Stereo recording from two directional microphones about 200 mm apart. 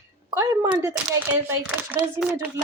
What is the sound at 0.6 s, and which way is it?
Speech, 20° right (ahead or behind).